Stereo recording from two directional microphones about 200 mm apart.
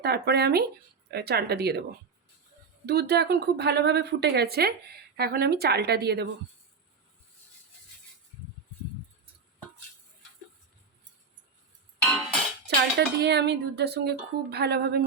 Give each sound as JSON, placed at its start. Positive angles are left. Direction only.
{"t": 0.0, "sound": "speech", "side_deg": -55}
{"t": 2.8, "sound": "speech", "side_deg": -55}
{"t": 12.6, "sound": "speech", "side_deg": -55}